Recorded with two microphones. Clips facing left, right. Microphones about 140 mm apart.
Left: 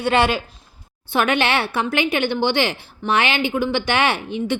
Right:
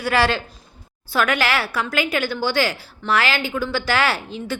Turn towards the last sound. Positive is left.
turn(degrees=20)  # may be behind; listen again after turning